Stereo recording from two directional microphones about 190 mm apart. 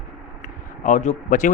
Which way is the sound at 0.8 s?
40° left (ahead or behind).